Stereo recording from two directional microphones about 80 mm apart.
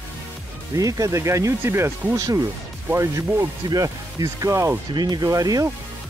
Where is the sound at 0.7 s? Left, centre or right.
Right.